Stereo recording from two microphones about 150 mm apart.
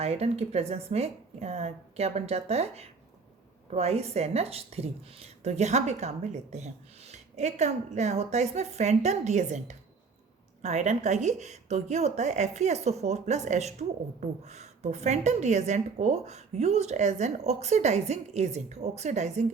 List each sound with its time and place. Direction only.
0.0 s speech: 45° right (ahead or behind)